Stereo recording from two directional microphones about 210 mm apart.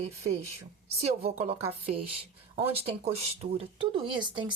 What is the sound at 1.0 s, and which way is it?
Speech, 30° right (ahead or behind).